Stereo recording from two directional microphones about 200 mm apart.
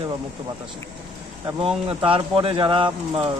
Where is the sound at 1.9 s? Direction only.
25° right (ahead or behind).